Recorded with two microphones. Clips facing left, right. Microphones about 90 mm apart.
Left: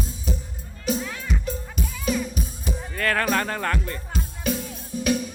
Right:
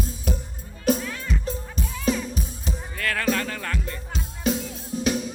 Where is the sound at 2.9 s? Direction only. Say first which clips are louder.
Left 2 dB; 45° left (ahead or behind).